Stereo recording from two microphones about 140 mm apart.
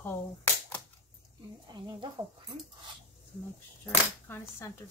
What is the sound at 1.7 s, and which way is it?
Speech, 35° right (ahead or behind).